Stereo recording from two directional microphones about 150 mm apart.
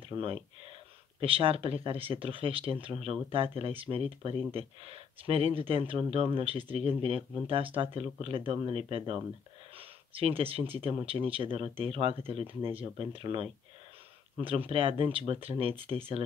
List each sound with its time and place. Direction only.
1.2 s speech: 40° right (ahead or behind)